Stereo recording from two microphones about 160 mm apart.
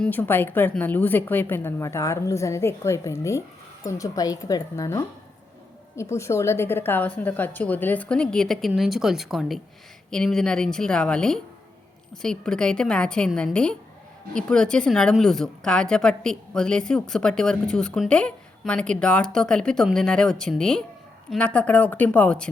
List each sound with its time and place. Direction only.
0.0 s a woman's voice: 10° left (ahead or behind)